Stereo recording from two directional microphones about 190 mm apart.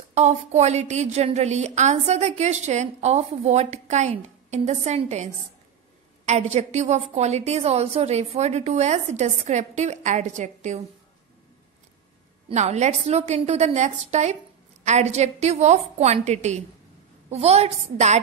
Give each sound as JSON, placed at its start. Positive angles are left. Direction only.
{"t": 0.1, "sound": "a woman's voice", "side_deg": -35}
{"t": 12.4, "sound": "a woman's voice", "side_deg": -35}